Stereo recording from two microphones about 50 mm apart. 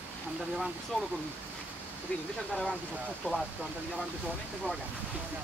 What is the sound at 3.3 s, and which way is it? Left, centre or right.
Speech, left.